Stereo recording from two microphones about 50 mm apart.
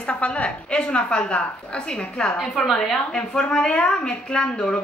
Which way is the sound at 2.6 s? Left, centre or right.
Centre.